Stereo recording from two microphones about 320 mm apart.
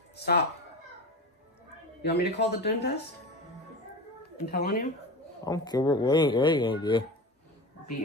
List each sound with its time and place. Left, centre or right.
0.1 s speech: left
2.0 s speech: left
4.5 s speech: left
5.4 s speech: centre